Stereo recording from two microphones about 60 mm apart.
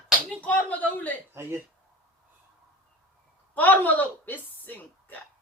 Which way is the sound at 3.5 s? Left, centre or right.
Left.